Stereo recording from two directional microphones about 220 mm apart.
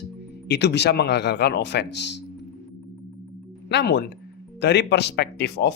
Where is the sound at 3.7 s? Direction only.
50° left (ahead or behind).